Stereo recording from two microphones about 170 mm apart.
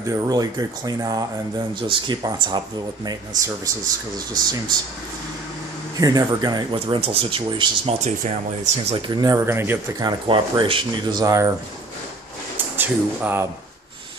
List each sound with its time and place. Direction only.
0.1 s speech: 20° right (ahead or behind)
5.9 s speech: 20° right (ahead or behind)
8.9 s speech: 25° right (ahead or behind)
10.0 s speech: 30° right (ahead or behind)
12.7 s speech: 10° right (ahead or behind)